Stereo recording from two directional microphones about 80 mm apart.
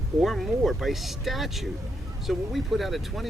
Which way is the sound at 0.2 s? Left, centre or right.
Centre.